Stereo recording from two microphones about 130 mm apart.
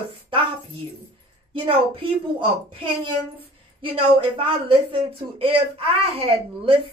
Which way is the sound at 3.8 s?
45° right (ahead or behind).